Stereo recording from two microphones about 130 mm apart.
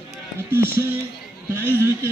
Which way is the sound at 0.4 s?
20° right (ahead or behind).